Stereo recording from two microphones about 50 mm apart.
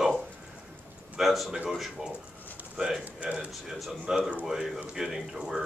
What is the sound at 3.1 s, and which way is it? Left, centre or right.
Speech, right.